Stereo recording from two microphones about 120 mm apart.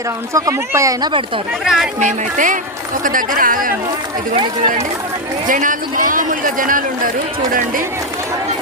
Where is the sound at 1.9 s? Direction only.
90° right.